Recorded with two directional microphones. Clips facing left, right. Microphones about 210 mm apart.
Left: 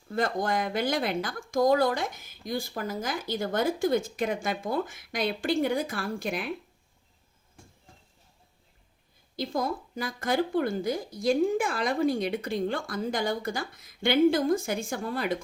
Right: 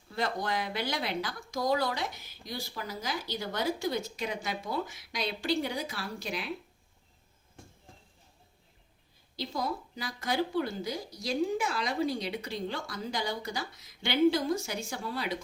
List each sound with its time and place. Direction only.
0.1 s speech: 50° left (ahead or behind)
9.3 s speech: 50° left (ahead or behind)